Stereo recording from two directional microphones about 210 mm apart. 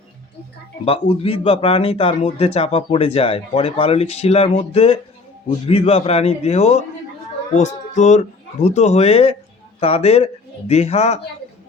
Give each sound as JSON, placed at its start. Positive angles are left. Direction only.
{"t": 0.9, "sound": "speech", "side_deg": 25}